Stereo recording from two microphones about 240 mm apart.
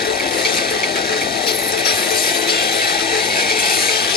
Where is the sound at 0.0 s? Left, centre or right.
Left.